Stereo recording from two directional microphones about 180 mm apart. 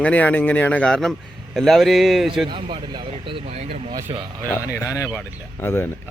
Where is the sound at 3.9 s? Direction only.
15° right (ahead or behind).